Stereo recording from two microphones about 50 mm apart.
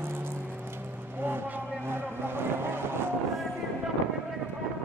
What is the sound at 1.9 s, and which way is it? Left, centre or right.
Vehicle, right.